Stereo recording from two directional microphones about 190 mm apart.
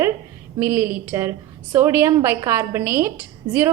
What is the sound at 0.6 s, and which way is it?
A woman's voice, 10° right (ahead or behind).